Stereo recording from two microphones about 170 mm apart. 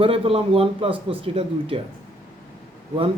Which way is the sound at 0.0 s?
35° right (ahead or behind).